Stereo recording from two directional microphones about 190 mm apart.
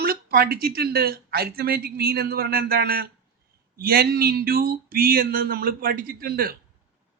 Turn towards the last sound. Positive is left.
turn(degrees=-50)  # may be behind; listen again after turning